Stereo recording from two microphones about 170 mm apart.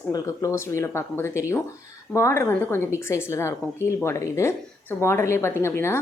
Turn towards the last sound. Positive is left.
turn(degrees=15)  # may be behind; listen again after turning